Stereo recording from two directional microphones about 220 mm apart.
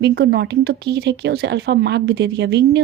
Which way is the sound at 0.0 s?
45° right (ahead or behind).